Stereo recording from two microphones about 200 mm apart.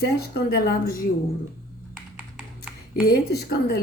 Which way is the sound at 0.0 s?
50° left (ahead or behind).